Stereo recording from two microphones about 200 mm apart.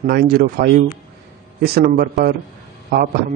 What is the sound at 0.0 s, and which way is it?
Speech, 50° right (ahead or behind).